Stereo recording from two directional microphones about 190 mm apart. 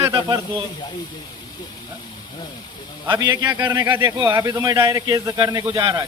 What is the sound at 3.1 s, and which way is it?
Speech, 20° right (ahead or behind).